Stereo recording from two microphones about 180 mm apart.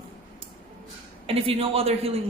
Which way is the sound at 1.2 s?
30° right (ahead or behind).